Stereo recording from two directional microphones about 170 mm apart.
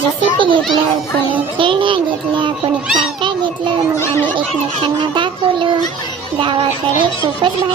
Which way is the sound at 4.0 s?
15° left (ahead or behind).